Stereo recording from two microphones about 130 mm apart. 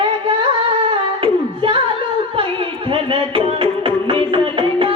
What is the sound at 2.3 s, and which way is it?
Music, 40° right (ahead or behind).